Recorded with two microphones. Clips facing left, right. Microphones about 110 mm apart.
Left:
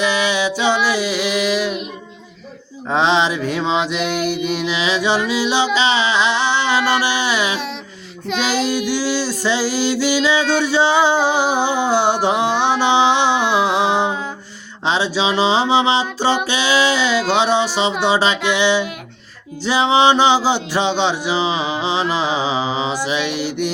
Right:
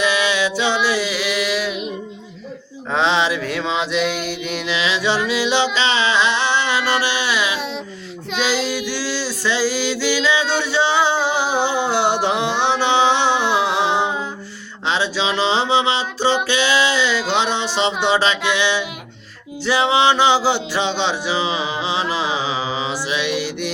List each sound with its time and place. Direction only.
0.2 s music: 15° left (ahead or behind)
2.9 s mantra: 20° left (ahead or behind)
3.9 s music: 15° left (ahead or behind)
8.9 s music: 15° left (ahead or behind)